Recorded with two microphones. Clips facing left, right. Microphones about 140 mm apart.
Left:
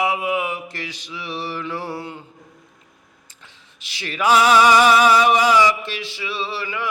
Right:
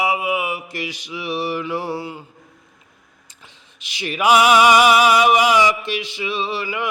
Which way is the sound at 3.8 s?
15° right (ahead or behind).